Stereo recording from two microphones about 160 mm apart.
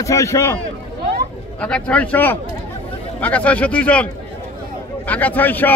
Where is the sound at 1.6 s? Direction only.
10° left (ahead or behind).